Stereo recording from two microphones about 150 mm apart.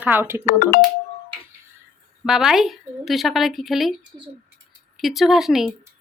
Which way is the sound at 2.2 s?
5° right (ahead or behind).